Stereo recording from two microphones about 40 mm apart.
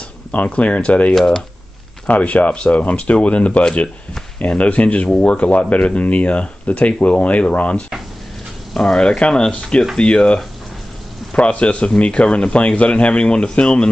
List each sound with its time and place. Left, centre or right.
0.3 s speech: left
1.1 s speech: centre
2.0 s speech: left
8.7 s speech: centre